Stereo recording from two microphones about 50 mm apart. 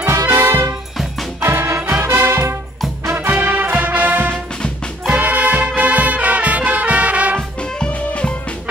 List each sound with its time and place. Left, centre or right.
0.0 s music: right
1.8 s music: right
2.0 s music: right
3.3 s music: right
7.9 s music: left